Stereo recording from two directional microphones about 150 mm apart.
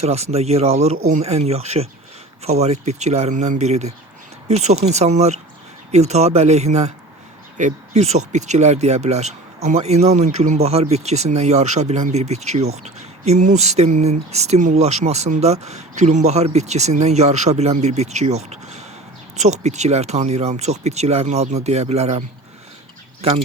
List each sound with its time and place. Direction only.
0.0 s speech: 45° right (ahead or behind)